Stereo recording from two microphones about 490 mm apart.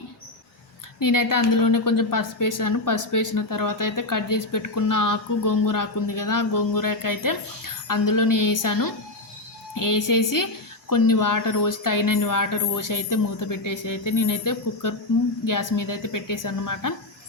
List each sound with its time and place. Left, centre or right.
0.9 s a woman's voice: left